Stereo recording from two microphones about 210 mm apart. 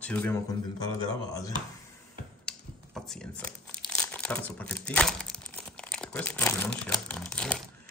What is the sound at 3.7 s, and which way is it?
Speech, 5° left (ahead or behind).